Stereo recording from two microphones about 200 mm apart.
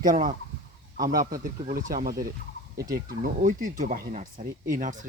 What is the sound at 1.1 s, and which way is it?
Speech, 15° right (ahead or behind).